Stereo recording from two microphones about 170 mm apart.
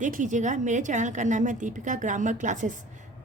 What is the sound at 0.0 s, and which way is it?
A woman's voice, 45° right (ahead or behind).